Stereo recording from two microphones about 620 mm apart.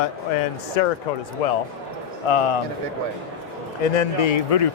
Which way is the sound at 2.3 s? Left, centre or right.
Left.